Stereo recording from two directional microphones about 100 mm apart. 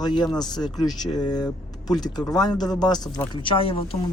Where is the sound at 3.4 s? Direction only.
65° left (ahead or behind).